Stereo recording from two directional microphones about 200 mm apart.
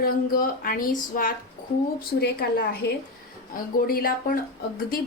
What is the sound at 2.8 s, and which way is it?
Speech, 55° left (ahead or behind).